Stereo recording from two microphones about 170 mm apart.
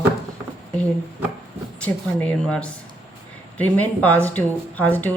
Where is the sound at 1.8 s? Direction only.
5° left (ahead or behind).